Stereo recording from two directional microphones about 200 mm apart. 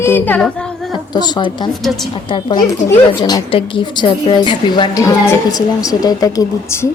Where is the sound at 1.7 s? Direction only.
Centre (ahead or behind).